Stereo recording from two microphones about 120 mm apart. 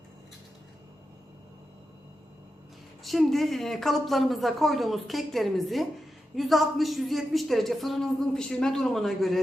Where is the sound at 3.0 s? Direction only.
Centre (ahead or behind).